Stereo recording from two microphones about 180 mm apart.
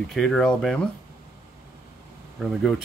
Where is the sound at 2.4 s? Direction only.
Centre (ahead or behind).